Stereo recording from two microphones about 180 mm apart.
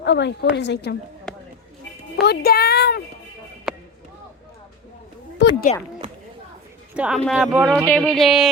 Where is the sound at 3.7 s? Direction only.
Centre (ahead or behind).